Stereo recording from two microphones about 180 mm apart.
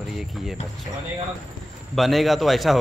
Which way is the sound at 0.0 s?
Centre (ahead or behind).